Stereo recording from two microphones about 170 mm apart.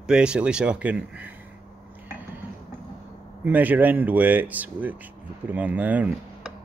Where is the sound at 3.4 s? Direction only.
10° right (ahead or behind).